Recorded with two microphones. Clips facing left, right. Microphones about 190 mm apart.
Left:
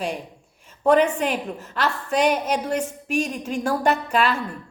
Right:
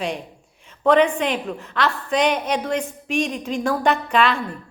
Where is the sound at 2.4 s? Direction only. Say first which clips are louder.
Right 1 dB; 10° left (ahead or behind).